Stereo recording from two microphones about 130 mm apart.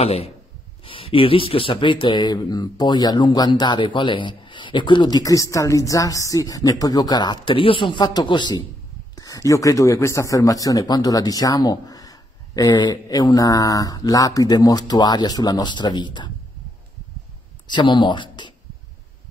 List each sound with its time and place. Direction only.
0.0 s speech: 50° left (ahead or behind); by 16.3 s 35° left (ahead or behind)
17.6 s speech: 35° left (ahead or behind)